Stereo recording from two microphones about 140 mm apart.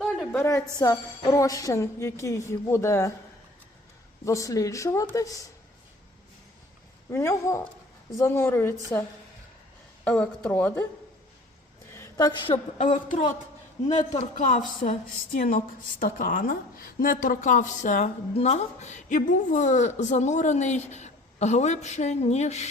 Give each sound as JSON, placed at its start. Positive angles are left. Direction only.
{"t": 0.0, "sound": "a sound", "side_deg": 5}
{"t": 0.3, "sound": "a woman's voice", "side_deg": 20}
{"t": 4.3, "sound": "a woman's voice", "side_deg": 25}
{"t": 7.1, "sound": "a woman's voice", "side_deg": 20}
{"t": 11.9, "sound": "a sound", "side_deg": 25}
{"t": 12.8, "sound": "a woman's voice", "side_deg": 60}
{"t": 14.3, "sound": "a woman's voice", "side_deg": 65}
{"t": 18.3, "sound": "a woman's voice", "side_deg": 50}